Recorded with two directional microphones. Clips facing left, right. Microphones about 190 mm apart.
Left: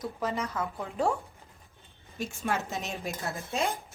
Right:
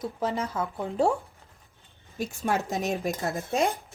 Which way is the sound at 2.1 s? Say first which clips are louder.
Right 4 dB; 40° right (ahead or behind).